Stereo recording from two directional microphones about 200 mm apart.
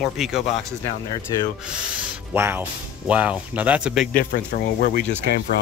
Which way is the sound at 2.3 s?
10° right (ahead or behind).